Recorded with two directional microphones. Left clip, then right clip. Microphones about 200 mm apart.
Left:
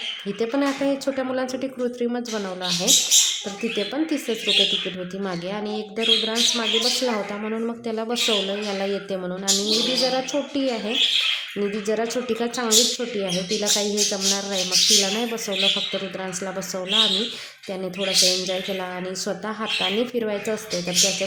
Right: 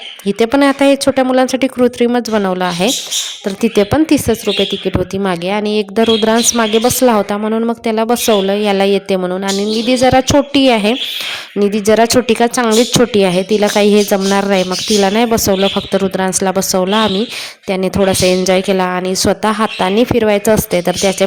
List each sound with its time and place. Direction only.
0.3 s speech: 45° right (ahead or behind)